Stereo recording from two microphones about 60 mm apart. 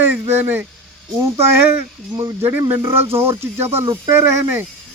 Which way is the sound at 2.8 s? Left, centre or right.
Right.